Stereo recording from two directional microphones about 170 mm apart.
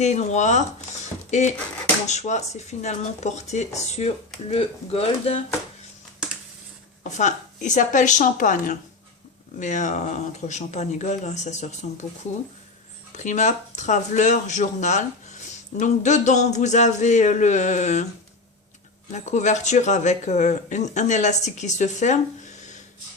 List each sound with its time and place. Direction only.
0.0 s speech: 40° left (ahead or behind)
7.0 s speech: 45° left (ahead or behind)
13.1 s speech: 45° left (ahead or behind)
19.1 s speech: 45° left (ahead or behind)